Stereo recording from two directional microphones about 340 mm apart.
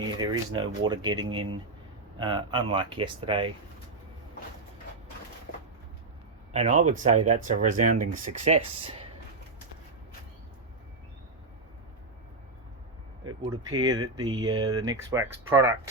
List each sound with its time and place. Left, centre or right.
0.2 s speech: centre
6.5 s speech: centre
13.2 s speech: centre